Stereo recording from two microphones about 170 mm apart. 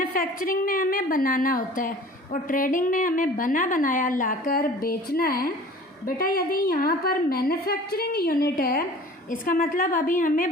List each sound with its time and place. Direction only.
0.1 s a woman's voice: 55° left (ahead or behind)